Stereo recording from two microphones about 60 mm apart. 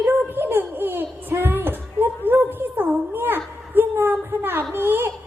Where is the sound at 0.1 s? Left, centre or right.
Right.